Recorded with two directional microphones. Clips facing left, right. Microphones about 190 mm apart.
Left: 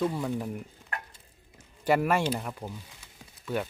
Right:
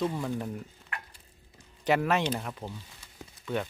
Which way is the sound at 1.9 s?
10° left (ahead or behind).